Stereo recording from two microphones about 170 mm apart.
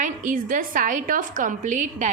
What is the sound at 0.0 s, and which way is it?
A woman's voice, 50° right (ahead or behind).